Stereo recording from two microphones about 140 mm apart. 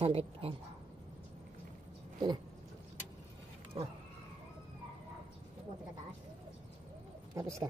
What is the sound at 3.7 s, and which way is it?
Speech, 40° right (ahead or behind).